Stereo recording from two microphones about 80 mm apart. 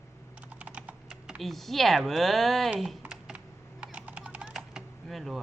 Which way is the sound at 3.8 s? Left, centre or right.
Centre.